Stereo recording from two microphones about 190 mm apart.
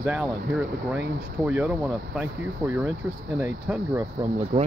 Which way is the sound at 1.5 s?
5° right (ahead or behind).